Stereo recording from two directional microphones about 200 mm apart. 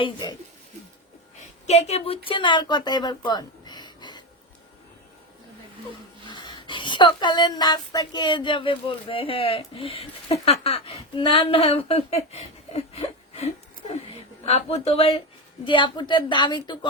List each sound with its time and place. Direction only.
0.0 s speech: 20° left (ahead or behind)
1.6 s speech: 35° left (ahead or behind)
6.2 s speech: 25° left (ahead or behind)